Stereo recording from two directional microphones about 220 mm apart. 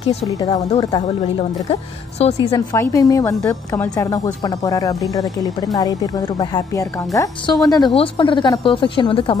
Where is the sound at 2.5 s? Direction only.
15° left (ahead or behind).